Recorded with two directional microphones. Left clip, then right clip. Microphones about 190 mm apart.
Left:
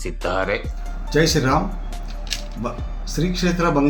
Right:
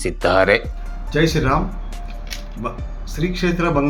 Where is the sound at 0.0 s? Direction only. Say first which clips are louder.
Right 7 dB; 20° right (ahead or behind).